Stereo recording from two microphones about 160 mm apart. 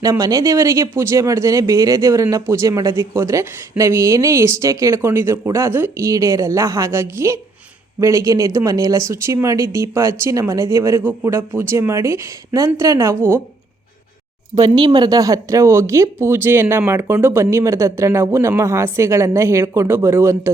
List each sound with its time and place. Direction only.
0.0 s speech: 20° right (ahead or behind)
14.5 s speech: 25° right (ahead or behind)